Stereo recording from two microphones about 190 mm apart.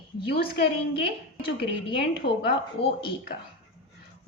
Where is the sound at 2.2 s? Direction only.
60° left (ahead or behind).